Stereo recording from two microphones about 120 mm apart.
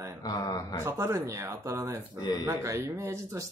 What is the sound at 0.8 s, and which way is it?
Speech, 25° right (ahead or behind).